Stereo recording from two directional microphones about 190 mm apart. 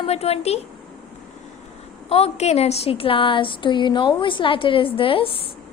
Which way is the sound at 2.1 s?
35° left (ahead or behind).